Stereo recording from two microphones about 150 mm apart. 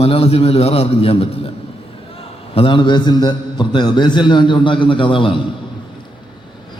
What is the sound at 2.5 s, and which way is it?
A man's voice, 35° left (ahead or behind).